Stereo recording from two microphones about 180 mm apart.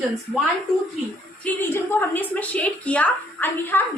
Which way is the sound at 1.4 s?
10° left (ahead or behind).